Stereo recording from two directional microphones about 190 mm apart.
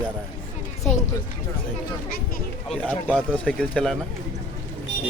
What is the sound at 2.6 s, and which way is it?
A man's voice, 5° left (ahead or behind).